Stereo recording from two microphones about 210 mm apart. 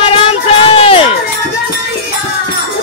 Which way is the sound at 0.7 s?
25° left (ahead or behind).